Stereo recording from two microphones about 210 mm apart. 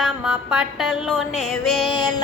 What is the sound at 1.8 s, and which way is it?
Music, 20° left (ahead or behind).